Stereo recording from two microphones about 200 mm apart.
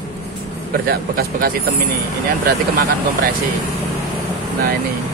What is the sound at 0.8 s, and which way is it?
Speech, 50° right (ahead or behind).